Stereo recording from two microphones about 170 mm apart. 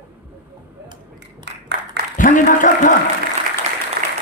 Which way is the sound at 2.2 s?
50° left (ahead or behind).